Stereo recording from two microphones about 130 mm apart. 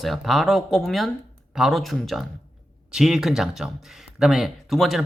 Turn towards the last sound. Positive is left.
turn(degrees=0)  # may be behind; listen again after turning